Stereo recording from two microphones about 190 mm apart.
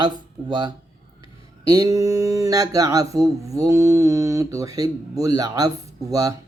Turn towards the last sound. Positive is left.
turn(degrees=-20)  # may be behind; listen again after turning